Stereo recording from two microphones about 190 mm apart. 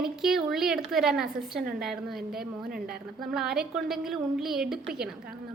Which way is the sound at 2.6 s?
50° right (ahead or behind).